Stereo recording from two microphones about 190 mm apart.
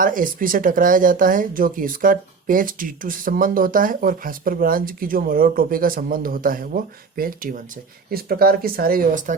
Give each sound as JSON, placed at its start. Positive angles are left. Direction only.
{"t": 0.0, "sound": "speech", "side_deg": -45}